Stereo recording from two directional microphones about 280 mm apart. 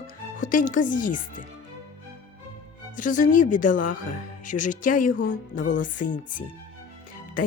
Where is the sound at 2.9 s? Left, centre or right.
Left.